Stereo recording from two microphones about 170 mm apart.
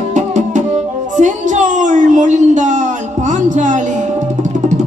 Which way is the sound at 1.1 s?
45° right (ahead or behind).